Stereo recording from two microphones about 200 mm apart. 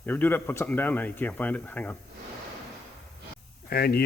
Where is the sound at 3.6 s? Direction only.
50° left (ahead or behind).